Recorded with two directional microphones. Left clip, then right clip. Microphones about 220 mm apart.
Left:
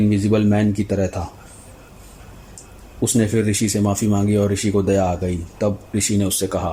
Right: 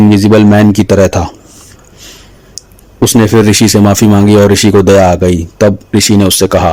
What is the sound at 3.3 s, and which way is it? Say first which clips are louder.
Speech: right 14 dB; 40° right (ahead or behind).